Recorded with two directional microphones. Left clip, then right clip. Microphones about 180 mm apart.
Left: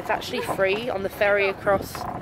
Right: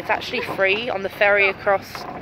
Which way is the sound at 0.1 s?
10° left (ahead or behind).